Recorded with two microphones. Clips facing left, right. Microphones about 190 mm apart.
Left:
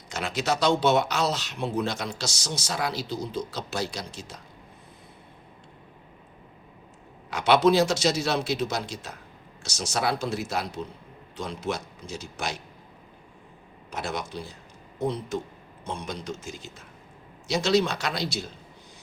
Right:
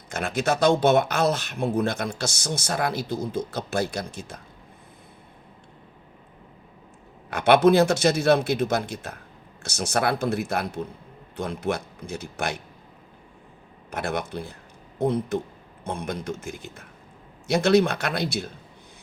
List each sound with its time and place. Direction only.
0.1 s speech: 55° right (ahead or behind)
7.3 s a man's voice: 55° right (ahead or behind)
13.9 s a man's voice: 55° right (ahead or behind)